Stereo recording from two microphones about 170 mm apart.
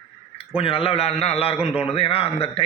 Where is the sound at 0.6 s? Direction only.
35° left (ahead or behind).